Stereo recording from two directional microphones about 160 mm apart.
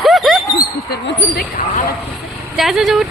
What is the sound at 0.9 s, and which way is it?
Speech, 70° left (ahead or behind).